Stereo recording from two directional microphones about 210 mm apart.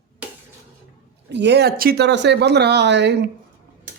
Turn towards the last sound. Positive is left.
turn(degrees=-55)  # may be behind; listen again after turning